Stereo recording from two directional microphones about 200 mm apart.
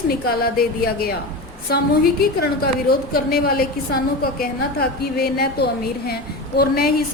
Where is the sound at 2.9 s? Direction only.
50° left (ahead or behind).